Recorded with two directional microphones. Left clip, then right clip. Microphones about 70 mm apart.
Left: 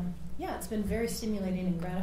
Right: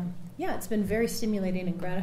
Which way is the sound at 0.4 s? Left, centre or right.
Right.